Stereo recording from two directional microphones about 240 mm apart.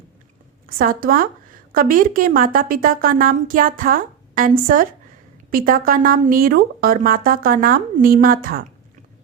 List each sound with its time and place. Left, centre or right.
0.8 s a woman's voice: right